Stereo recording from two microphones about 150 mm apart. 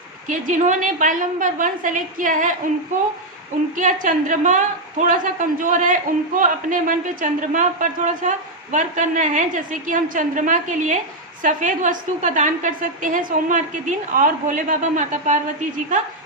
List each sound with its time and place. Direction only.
0.3 s a man's voice: 55° right (ahead or behind)
4.0 s a man's voice: 60° right (ahead or behind)